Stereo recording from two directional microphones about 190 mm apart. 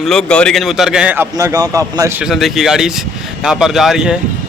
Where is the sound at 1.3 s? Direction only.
20° right (ahead or behind).